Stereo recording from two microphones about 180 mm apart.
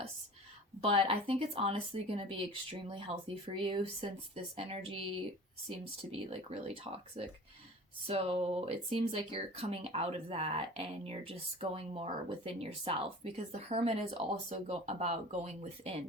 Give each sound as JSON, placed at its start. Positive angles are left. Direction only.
{"t": 0.8, "sound": "speech", "side_deg": -30}